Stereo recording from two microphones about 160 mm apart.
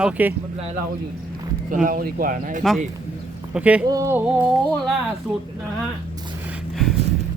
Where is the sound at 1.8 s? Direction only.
60° right (ahead or behind).